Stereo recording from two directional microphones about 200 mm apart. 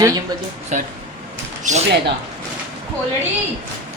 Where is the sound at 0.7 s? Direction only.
35° right (ahead or behind).